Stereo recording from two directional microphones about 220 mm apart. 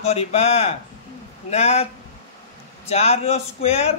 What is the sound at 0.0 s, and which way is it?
Speech, 30° left (ahead or behind).